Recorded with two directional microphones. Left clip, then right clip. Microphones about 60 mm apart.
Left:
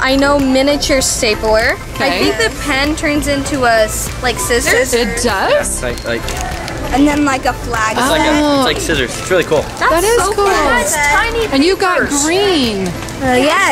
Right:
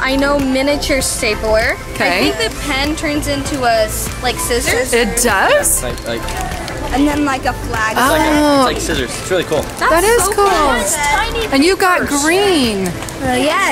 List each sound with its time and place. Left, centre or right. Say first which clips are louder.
0.0 s speech: left 3 dB; left
2.0 s speech: right 2 dB; right
2.2 s speech: left 2 dB; left
4.9 s a woman's voice: right 1 dB; right
6.9 s speech: left 3 dB; left
9.8 s speech: right 1 dB; centre
10.4 s speech: left 1 dB; left
11.5 s a woman's voice: right 2 dB; right
12.0 s speech: left 2 dB; left
12.3 s a woman's voice: right 3 dB; right
13.2 s speech: left 3 dB; left